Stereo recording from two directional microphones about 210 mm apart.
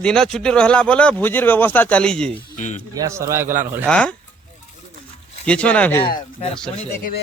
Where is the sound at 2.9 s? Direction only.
15° right (ahead or behind).